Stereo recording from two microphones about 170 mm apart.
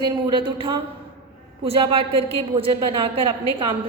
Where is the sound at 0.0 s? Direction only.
25° right (ahead or behind).